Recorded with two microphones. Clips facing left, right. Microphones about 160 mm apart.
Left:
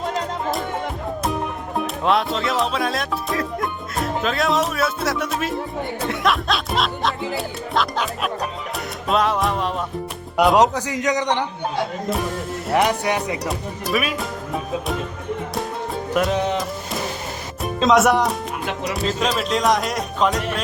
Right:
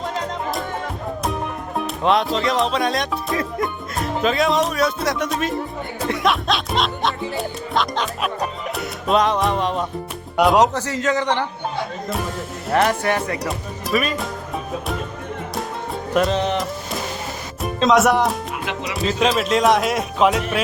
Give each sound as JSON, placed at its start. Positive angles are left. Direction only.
{"t": 2.0, "sound": "speech", "side_deg": 0}
{"t": 10.8, "sound": "a man's voice", "side_deg": 15}
{"t": 12.7, "sound": "a man's voice", "side_deg": 15}
{"t": 13.4, "sound": "speech", "side_deg": 0}
{"t": 16.1, "sound": "a man's voice", "side_deg": 10}
{"t": 17.6, "sound": "speech", "side_deg": 0}